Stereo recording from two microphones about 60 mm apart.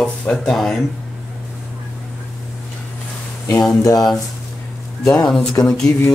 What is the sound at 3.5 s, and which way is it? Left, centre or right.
Speech, left.